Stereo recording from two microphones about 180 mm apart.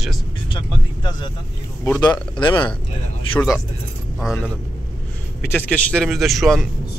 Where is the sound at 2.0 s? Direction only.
25° left (ahead or behind).